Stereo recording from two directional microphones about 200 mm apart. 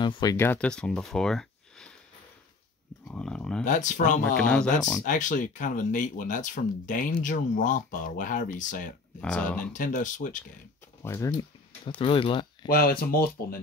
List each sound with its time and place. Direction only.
0.0 s speech: 20° left (ahead or behind); by 1.9 s 5° left (ahead or behind)
3.1 s a sound: 5° left (ahead or behind)
3.6 s speech: 40° left (ahead or behind)
4.4 s speech: 5° left (ahead or behind)
5.0 s speech: 40° left (ahead or behind)
9.2 s speech: 5° left (ahead or behind)
9.7 s speech: 40° left (ahead or behind)
11.0 s speech: 15° left (ahead or behind)
12.0 s speech: 25° left (ahead or behind)
12.6 s speech: 50° left (ahead or behind)